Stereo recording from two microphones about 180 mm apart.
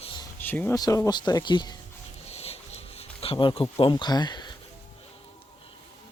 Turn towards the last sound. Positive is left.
turn(degrees=25)  # may be behind; listen again after turning